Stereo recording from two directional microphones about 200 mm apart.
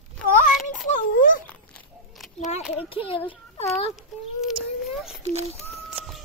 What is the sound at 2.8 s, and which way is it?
A child's voice, 25° left (ahead or behind).